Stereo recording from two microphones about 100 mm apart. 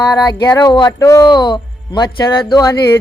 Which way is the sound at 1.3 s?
50° left (ahead or behind).